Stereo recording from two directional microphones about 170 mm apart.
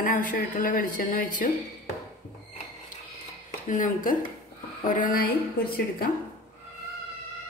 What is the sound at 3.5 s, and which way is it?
A woman's voice, 50° left (ahead or behind).